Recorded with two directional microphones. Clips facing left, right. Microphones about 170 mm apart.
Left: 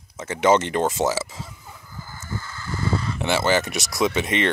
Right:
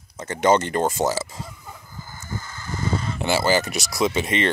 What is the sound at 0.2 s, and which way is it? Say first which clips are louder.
Speech: even; 5° left (ahead or behind).